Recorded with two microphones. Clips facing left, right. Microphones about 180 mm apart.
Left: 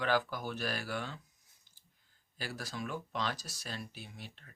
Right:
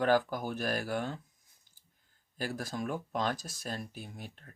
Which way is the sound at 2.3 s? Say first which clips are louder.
Right 5 dB; 50° right (ahead or behind).